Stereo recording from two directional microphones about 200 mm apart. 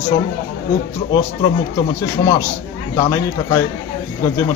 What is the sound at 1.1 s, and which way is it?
A man's voice, 20° left (ahead or behind).